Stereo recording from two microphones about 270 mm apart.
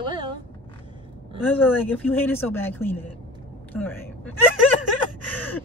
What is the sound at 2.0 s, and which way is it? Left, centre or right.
Speech, centre.